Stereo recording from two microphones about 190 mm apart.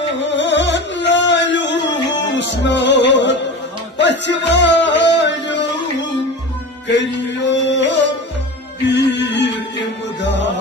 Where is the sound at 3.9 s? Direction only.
70° left (ahead or behind).